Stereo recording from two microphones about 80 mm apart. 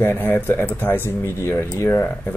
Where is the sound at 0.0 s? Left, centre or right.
Left.